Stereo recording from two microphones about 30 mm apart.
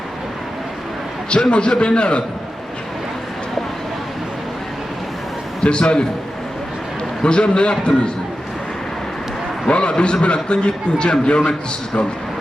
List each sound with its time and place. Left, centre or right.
1.5 s a man's voice: left
5.6 s a man's voice: left
7.2 s a man's voice: left
9.6 s a man's voice: left